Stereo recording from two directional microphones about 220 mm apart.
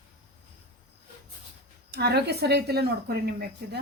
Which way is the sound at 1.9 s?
50° right (ahead or behind).